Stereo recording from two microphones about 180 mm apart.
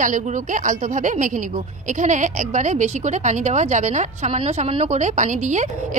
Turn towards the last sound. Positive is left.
turn(degrees=-40)  # may be behind; listen again after turning